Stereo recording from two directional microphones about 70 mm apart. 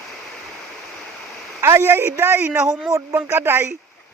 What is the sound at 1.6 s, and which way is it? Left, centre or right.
A man's voice, right.